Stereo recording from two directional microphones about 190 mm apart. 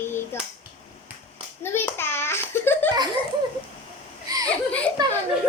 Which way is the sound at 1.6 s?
10° left (ahead or behind).